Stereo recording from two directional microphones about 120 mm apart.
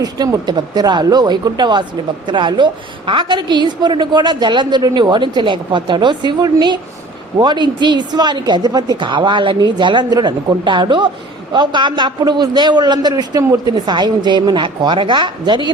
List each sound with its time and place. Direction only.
0.0 s a woman's voice: 35° right (ahead or behind)